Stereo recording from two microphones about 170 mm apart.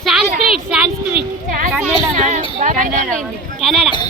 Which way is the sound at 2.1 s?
45° right (ahead or behind).